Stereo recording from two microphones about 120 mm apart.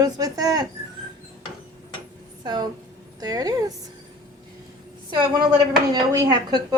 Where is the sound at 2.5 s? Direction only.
35° right (ahead or behind).